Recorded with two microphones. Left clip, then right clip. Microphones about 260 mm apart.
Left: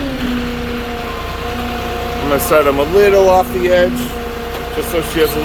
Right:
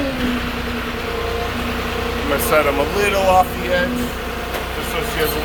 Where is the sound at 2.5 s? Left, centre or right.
Left.